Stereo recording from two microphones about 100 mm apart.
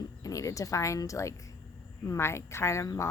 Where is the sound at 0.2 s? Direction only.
35° left (ahead or behind).